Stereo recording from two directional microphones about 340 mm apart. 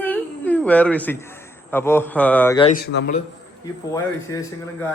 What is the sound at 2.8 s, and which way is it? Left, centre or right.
Speech, left.